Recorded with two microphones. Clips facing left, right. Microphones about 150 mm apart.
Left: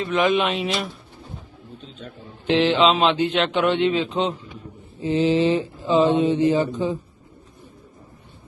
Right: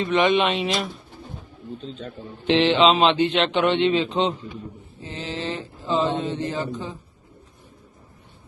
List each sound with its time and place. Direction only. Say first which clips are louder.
0.0 s a man's voice: right 1 dB; centre (ahead or behind)
1.8 s speech: right 3 dB; 40° right (ahead or behind)
2.5 s a man's voice: even; 5° left (ahead or behind)
5.0 s speech: left 12 dB; 15° left (ahead or behind)